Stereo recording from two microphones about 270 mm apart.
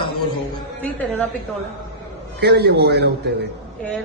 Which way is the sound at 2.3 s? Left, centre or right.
Right.